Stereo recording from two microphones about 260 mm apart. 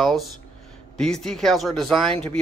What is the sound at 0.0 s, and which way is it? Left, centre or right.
Speech, centre.